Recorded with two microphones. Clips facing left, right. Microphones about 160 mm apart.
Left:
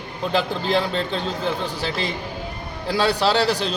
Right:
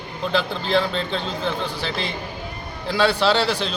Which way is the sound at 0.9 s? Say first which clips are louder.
Left 1 dB; 40° left (ahead or behind).